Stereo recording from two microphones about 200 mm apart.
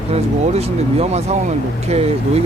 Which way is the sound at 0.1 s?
30° right (ahead or behind).